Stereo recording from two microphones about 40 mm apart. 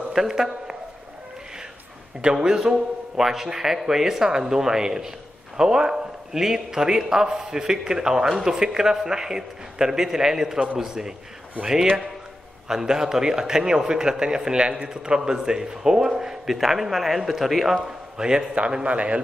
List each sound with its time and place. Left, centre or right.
0.1 s a man's voice: centre
2.4 s a man's voice: right
3.2 s a man's voice: centre
18.9 s a man's voice: right